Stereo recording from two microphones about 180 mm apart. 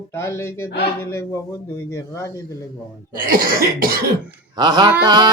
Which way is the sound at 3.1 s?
55° right (ahead or behind).